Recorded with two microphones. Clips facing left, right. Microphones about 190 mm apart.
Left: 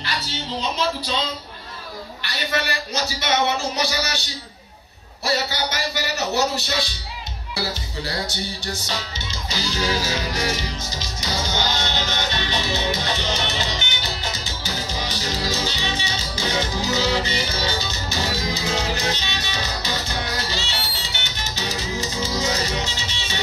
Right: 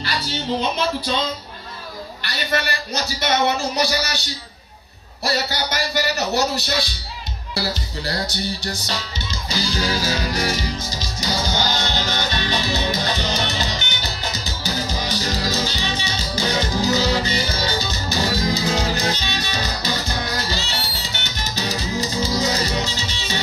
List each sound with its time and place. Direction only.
0.6 s speech: 55° right (ahead or behind)
3.2 s a man's voice: 35° right (ahead or behind)
5.2 s a man's voice: 35° right (ahead or behind)
11.4 s music: 35° right (ahead or behind)